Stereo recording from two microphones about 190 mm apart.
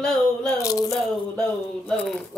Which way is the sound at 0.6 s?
20° left (ahead or behind).